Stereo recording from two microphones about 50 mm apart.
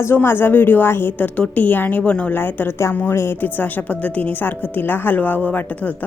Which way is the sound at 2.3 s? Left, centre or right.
Left.